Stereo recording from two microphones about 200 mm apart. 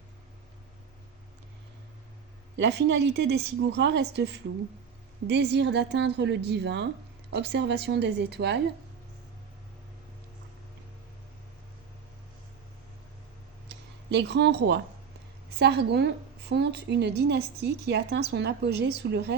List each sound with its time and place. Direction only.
2.6 s a woman's voice: 60° right (ahead or behind)
13.7 s a sound: 60° right (ahead or behind)
15.4 s a woman's voice: 55° right (ahead or behind)